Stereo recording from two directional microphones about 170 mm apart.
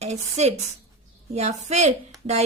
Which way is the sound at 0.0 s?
40° right (ahead or behind).